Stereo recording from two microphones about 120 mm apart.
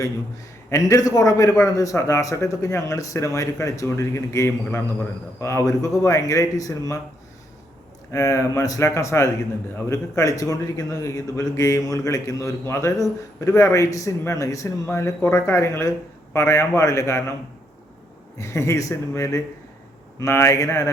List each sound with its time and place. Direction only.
0.7 s a man's voice: 25° left (ahead or behind)
8.1 s a man's voice: 25° left (ahead or behind)
18.3 s a man's voice: 25° left (ahead or behind)